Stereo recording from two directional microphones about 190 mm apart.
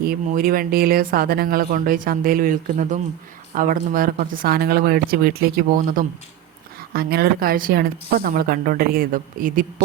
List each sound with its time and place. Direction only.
0.0 s speech: 50° right (ahead or behind)